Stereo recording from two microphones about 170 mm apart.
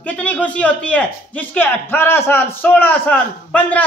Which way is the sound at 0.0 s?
10° left (ahead or behind).